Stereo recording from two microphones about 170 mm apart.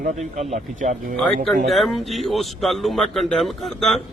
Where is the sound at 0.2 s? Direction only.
45° right (ahead or behind).